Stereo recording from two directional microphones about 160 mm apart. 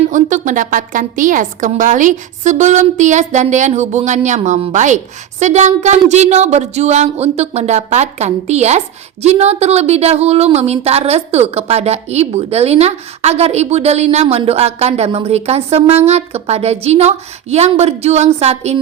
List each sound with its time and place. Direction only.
0.1 s a woman's voice: 50° right (ahead or behind)